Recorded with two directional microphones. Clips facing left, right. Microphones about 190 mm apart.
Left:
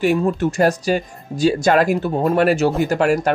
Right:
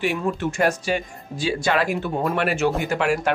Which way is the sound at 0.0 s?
40° left (ahead or behind).